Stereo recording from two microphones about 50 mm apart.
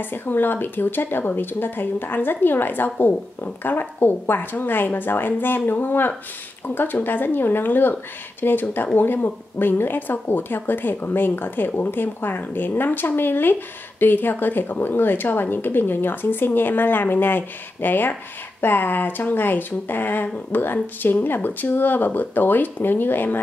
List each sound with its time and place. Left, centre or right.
0.0 s a woman's voice: left